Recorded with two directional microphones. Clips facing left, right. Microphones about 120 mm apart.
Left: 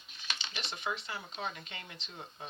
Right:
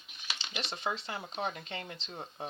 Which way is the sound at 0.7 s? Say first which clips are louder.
Right 2 dB; 35° right (ahead or behind).